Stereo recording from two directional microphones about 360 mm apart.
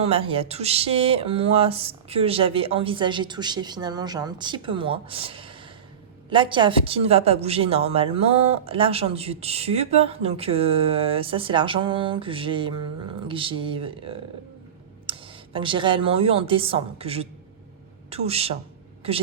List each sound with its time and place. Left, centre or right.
0.0 s speech: centre